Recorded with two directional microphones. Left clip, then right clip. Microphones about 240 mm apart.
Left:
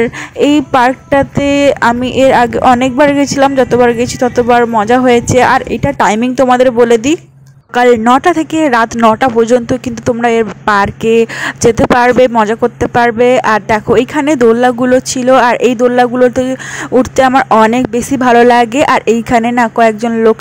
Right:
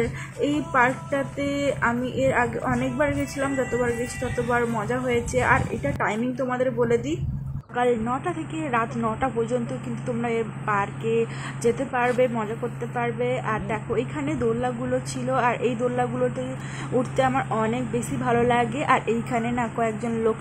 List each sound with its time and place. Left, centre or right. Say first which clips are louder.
0.0 s speech: left 15 dB; left